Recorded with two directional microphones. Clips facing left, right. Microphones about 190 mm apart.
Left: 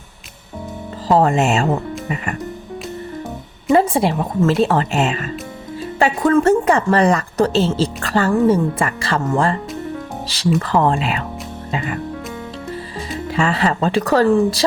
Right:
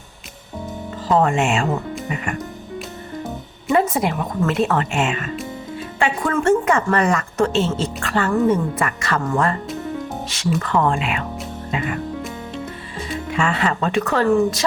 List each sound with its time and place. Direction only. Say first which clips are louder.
1.0 s a woman's voice: left 3 dB; 35° left (ahead or behind)
3.7 s a woman's voice: left 4 dB; 30° left (ahead or behind)
13.3 s a woman's voice: left 3 dB; 35° left (ahead or behind)